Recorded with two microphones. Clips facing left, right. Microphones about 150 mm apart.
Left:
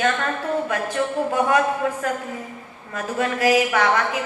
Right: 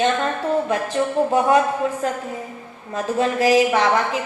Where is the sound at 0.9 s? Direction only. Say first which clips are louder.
Right 4 dB; 25° right (ahead or behind).